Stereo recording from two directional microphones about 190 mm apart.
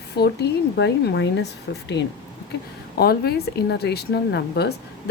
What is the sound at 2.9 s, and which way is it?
A woman's voice, 55° left (ahead or behind).